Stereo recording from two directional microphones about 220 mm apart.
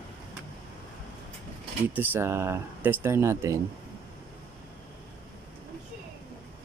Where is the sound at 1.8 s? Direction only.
10° right (ahead or behind).